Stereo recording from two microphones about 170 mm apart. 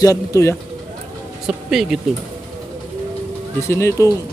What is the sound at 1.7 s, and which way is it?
Speech, centre (ahead or behind).